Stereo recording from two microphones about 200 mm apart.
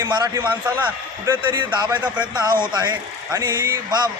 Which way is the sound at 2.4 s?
20° right (ahead or behind).